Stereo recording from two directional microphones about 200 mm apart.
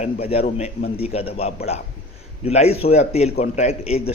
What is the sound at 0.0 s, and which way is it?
Speech, 30° left (ahead or behind).